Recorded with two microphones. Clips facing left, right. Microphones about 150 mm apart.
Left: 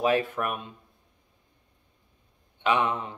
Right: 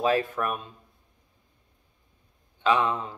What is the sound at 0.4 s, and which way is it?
Speech, 20° left (ahead or behind).